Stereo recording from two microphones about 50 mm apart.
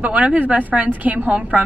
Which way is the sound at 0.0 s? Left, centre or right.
Right.